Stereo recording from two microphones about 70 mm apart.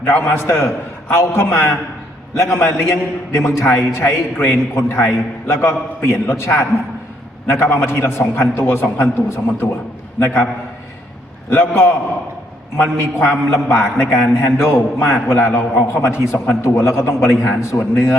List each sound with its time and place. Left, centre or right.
0.0 s a man's voice: left